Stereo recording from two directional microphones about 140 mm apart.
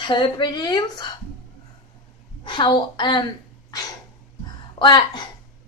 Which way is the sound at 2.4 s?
35° left (ahead or behind).